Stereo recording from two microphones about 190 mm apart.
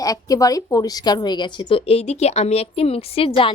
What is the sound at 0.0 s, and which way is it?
A woman's voice, 20° left (ahead or behind).